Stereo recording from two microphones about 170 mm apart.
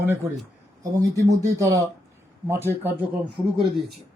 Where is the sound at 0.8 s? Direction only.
20° right (ahead or behind).